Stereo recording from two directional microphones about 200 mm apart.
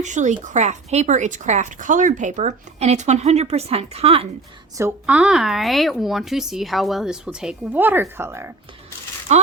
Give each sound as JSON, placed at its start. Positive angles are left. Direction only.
{"t": 0.0, "sound": "speech", "side_deg": -35}
{"t": 4.8, "sound": "a woman's voice", "side_deg": -10}
{"t": 9.3, "sound": "speech", "side_deg": -35}